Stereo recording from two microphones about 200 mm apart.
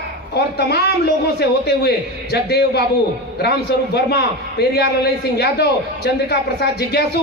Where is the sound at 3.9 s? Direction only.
55° left (ahead or behind).